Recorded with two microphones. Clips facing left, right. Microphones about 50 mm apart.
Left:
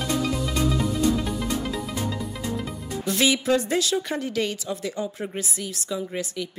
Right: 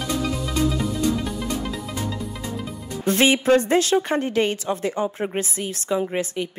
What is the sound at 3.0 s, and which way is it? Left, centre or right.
A woman's voice, right.